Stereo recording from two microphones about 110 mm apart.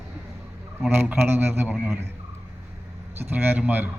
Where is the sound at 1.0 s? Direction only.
20° right (ahead or behind).